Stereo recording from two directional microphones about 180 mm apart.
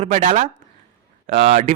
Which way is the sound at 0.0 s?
45° right (ahead or behind).